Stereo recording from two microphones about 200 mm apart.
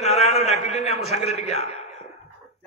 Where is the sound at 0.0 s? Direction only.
30° left (ahead or behind).